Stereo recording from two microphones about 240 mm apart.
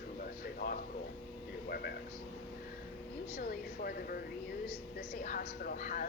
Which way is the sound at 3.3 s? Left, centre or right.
Left.